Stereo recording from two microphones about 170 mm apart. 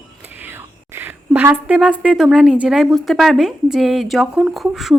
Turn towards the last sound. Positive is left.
turn(degrees=0)  # may be behind; listen again after turning